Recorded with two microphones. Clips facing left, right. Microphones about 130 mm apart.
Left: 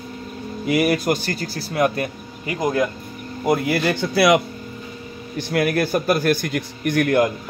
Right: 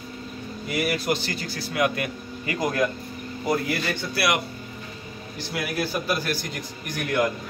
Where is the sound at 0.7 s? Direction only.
70° left (ahead or behind).